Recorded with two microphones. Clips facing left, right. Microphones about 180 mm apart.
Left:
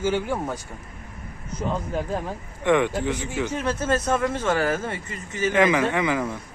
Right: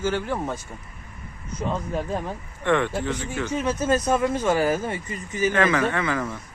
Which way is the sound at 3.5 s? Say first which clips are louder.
Right 3 dB; 10° right (ahead or behind).